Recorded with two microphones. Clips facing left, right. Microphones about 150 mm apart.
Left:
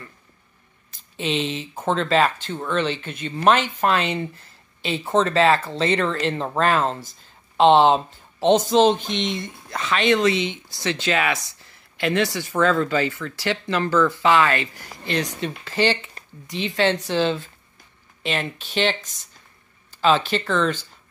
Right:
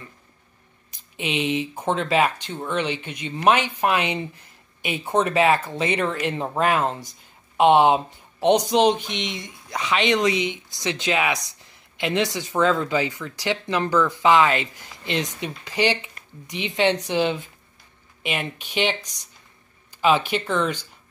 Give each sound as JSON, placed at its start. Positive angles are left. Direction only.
{"t": 1.1, "sound": "speech", "side_deg": -10}